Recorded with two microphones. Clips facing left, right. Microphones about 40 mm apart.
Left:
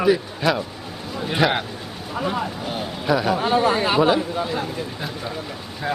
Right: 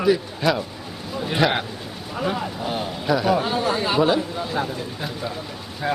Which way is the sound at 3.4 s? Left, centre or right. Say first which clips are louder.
Left 4 dB; left.